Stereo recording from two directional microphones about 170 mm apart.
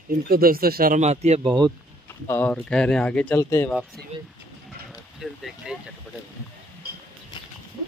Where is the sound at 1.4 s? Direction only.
25° right (ahead or behind).